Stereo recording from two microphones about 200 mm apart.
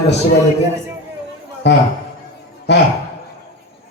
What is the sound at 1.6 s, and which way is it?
Speech, 60° left (ahead or behind).